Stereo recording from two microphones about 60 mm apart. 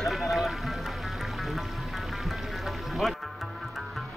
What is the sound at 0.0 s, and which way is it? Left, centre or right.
Music, centre.